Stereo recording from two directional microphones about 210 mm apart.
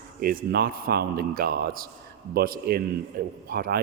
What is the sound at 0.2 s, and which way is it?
Speech, 45° right (ahead or behind).